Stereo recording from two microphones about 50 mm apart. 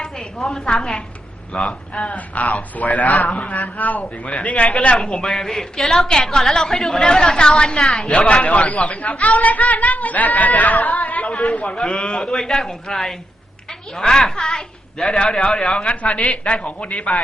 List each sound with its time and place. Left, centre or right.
0.3 s a woman's voice: centre
1.6 s a man's voice: left
4.9 s a man's voice: centre; by 11.3 s left
11.7 s a man's voice: centre